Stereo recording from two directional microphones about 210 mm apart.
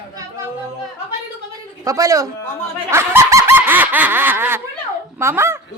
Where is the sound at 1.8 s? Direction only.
15° right (ahead or behind).